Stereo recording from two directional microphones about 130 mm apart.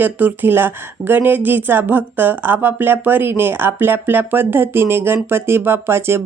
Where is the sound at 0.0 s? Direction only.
15° right (ahead or behind).